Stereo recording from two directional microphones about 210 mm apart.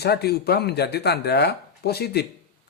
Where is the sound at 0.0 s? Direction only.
50° left (ahead or behind).